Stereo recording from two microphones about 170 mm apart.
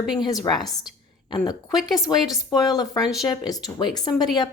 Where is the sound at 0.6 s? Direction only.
25° left (ahead or behind).